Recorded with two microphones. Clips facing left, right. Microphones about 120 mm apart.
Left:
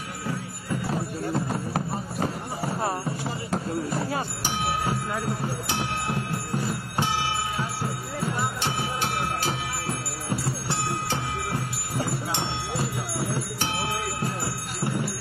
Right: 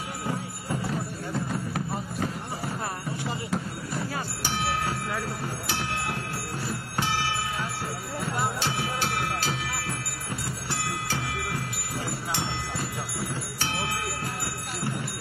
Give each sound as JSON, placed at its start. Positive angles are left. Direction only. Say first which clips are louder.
{"t": 1.3, "sound": "music", "louder": "left 2 dB", "side_deg": 35}
{"t": 3.9, "sound": "music", "louder": "even", "side_deg": 30}
{"t": 4.5, "sound": "music", "louder": "left 1 dB", "side_deg": 15}
{"t": 5.7, "sound": "speech", "louder": "even", "side_deg": 15}
{"t": 7.0, "sound": "music", "louder": "left 2 dB", "side_deg": 15}
{"t": 13.6, "sound": "bell", "louder": "left 2 dB", "side_deg": 20}